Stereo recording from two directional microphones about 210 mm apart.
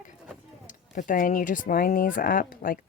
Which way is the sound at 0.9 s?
40° left (ahead or behind).